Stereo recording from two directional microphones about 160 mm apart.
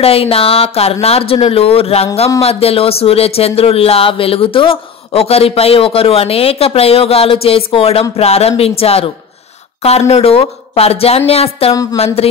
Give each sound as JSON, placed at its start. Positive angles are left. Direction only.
{"t": 0.0, "sound": "speech", "side_deg": 35}
{"t": 11.7, "sound": "a woman's voice", "side_deg": 20}